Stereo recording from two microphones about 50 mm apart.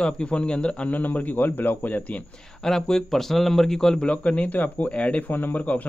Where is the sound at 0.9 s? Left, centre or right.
Left.